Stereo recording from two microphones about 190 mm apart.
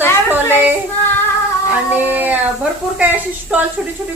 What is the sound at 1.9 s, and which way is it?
A woman's voice, 10° right (ahead or behind).